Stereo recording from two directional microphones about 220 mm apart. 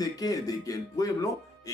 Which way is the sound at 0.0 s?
15° left (ahead or behind).